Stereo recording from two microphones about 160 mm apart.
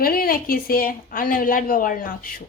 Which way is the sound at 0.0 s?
65° left (ahead or behind).